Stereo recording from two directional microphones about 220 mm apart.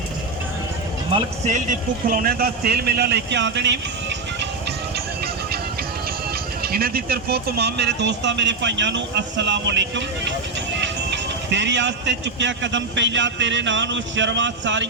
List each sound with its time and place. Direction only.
2.0 s speech: 40° right (ahead or behind)
6.6 s speech: 45° right (ahead or behind)